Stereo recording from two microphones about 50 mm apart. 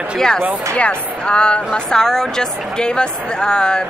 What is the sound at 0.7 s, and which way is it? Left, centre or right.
Speech, left.